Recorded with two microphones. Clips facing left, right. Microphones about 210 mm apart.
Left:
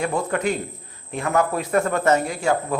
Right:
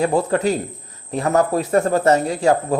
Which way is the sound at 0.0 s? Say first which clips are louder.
Right 5 dB; 35° right (ahead or behind).